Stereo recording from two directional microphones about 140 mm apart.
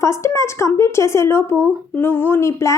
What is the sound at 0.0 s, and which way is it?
A woman's voice, 20° left (ahead or behind).